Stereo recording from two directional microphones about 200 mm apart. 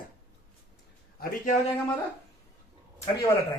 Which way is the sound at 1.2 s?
45° left (ahead or behind).